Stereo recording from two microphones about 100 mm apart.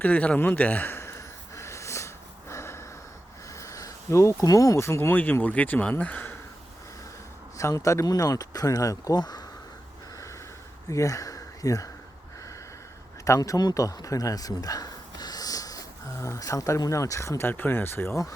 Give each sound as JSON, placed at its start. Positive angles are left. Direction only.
{"t": 0.0, "sound": "a sound", "side_deg": 15}
{"t": 2.5, "sound": "snort", "side_deg": 25}
{"t": 3.6, "sound": "speech", "side_deg": 35}
{"t": 7.6, "sound": "speech", "side_deg": 30}
{"t": 10.8, "sound": "speech", "side_deg": 35}
{"t": 13.2, "sound": "speech", "side_deg": 30}